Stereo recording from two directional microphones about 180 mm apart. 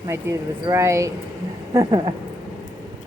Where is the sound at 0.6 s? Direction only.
15° right (ahead or behind).